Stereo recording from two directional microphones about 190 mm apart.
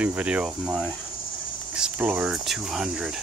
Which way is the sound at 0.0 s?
5° right (ahead or behind).